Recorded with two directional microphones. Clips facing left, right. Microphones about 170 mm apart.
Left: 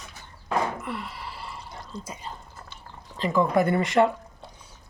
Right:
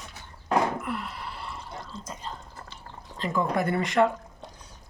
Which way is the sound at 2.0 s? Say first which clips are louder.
Even; 10° left (ahead or behind).